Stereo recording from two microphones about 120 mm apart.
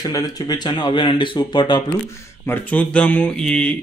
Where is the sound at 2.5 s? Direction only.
10° left (ahead or behind).